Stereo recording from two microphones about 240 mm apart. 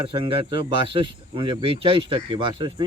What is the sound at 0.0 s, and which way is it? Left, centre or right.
Speech, right.